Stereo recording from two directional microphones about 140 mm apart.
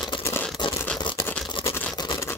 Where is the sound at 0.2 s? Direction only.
15° left (ahead or behind).